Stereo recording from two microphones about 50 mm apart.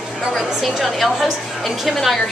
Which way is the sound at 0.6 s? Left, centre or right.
Centre.